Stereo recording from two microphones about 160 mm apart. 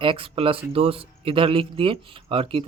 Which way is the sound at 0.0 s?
35° right (ahead or behind).